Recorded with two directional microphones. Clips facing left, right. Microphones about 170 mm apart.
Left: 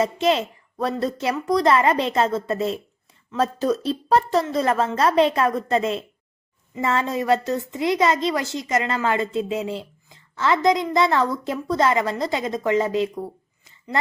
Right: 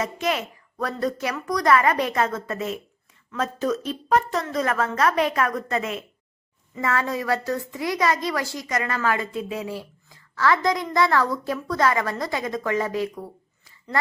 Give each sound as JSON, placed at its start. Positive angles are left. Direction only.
{"t": 0.0, "sound": "a woman's voice", "side_deg": 30}